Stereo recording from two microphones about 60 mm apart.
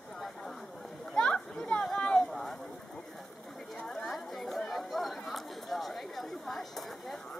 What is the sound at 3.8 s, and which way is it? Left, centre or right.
Chatter, centre.